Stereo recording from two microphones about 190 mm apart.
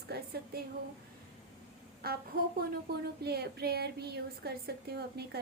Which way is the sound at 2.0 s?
50° right (ahead or behind).